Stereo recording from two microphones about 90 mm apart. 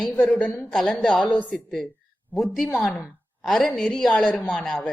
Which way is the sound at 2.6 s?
10° left (ahead or behind).